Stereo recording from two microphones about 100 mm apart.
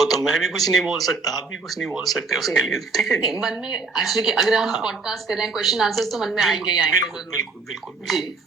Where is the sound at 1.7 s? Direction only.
Centre (ahead or behind).